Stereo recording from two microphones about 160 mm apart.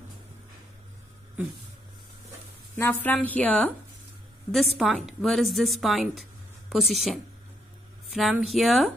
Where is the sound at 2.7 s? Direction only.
15° left (ahead or behind).